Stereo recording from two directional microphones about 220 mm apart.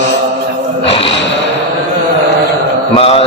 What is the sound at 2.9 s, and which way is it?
Mantra, 25° left (ahead or behind).